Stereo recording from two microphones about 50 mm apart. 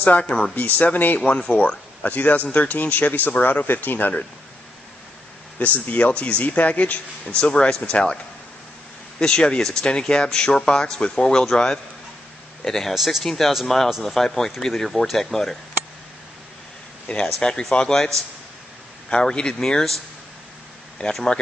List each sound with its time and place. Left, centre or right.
0.0 s speech: left
0.3 s speech: centre
0.6 s speech: left
3.6 s speech: left
5.6 s speech: left
7.5 s speech: centre
9.2 s speech: centre
12.9 s speech: centre
17.4 s speech: centre
19.0 s speech: centre
21.1 s speech: centre